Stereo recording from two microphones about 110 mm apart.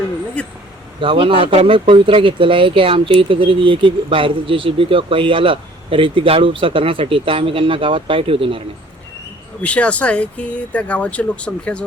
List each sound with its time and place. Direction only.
0.4 s speech: 10° left (ahead or behind)
0.9 s speech: 50° right (ahead or behind)
9.6 s speech: 10° left (ahead or behind)